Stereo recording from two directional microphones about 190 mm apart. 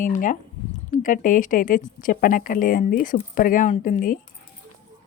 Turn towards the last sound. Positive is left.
turn(degrees=45)  # may be behind; listen again after turning